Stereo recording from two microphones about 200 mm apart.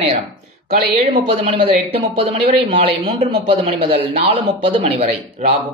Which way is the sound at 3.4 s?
25° right (ahead or behind).